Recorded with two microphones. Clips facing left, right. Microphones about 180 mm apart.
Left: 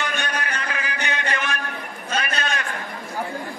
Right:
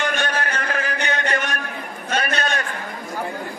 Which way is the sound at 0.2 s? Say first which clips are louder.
Right 4 dB; 55° right (ahead or behind).